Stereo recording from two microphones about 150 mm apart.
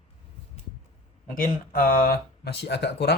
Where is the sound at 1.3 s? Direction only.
75° left (ahead or behind); by 3.2 s 90° left.